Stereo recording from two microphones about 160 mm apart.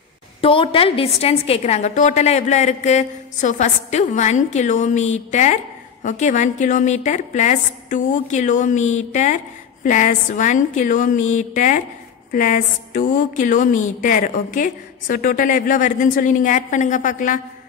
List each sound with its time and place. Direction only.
0.4 s a woman's voice: 35° left (ahead or behind); by 17.4 s 55° left (ahead or behind)